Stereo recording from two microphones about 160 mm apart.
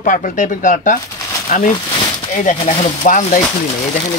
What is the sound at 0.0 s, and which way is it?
Speech, 55° left (ahead or behind).